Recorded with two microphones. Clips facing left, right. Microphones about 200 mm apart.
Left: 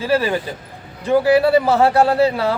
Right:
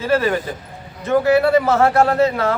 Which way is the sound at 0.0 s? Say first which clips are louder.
Even; 15° left (ahead or behind).